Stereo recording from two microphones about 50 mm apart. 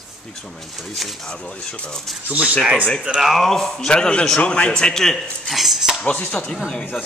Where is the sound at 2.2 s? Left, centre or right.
Right.